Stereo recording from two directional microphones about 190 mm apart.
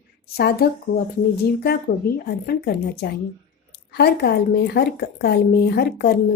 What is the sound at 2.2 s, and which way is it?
A woman's voice, 55° left (ahead or behind).